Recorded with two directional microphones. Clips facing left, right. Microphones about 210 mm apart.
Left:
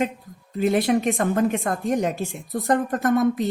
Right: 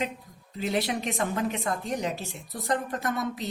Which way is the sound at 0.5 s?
50° left (ahead or behind).